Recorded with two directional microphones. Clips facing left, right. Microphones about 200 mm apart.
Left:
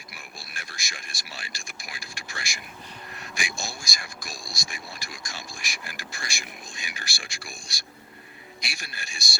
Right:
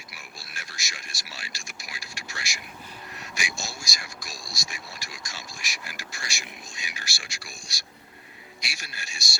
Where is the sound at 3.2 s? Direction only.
55° left (ahead or behind).